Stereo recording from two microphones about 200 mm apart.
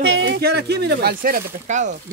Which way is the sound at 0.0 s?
80° right.